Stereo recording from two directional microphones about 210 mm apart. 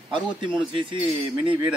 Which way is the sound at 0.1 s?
25° right (ahead or behind).